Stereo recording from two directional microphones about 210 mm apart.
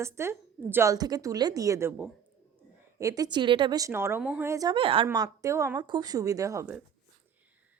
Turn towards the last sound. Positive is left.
turn(degrees=-15)  # may be behind; listen again after turning